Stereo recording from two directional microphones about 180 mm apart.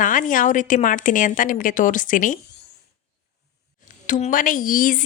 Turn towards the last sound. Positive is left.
turn(degrees=50)  # may be behind; listen again after turning